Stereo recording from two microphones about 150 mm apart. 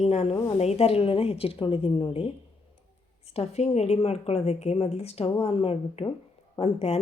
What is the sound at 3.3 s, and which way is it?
A woman's voice, 45° left (ahead or behind).